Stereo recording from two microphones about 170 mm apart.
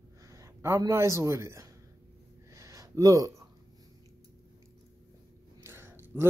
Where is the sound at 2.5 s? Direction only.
20° right (ahead or behind).